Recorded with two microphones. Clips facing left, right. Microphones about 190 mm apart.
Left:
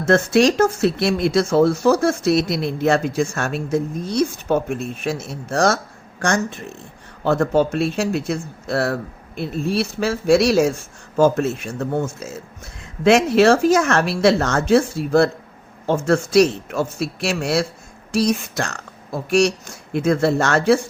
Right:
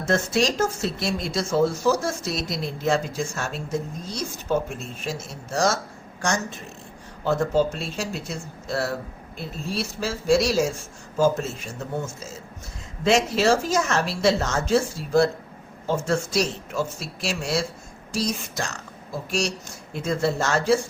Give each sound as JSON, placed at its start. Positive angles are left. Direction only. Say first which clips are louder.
{"t": 0.0, "sound": "speech", "louder": "left 7 dB", "side_deg": 65}